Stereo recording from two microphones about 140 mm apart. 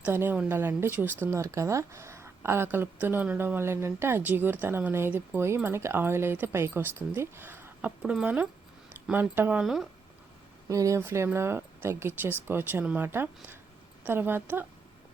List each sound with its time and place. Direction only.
0.0 s speech: 15° right (ahead or behind)
10.7 s speech: 25° right (ahead or behind)